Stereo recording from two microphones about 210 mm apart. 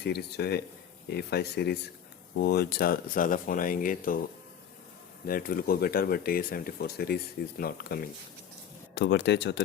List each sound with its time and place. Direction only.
0.0 s speech: 50° left (ahead or behind)
5.2 s speech: 45° left (ahead or behind)